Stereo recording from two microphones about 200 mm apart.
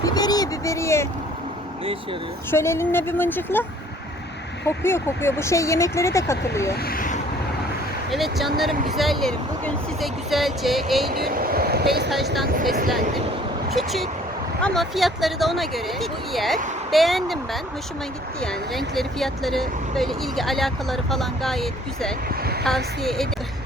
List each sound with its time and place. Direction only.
0.0 s speech: 20° left (ahead or behind)
2.5 s speech: 10° left (ahead or behind)
6.8 s vehicle: 45° left (ahead or behind)
8.1 s speech: centre (ahead or behind)
11.1 s speech: 45° right (ahead or behind)
12.1 s speech: centre (ahead or behind)
13.7 s speech: centre (ahead or behind)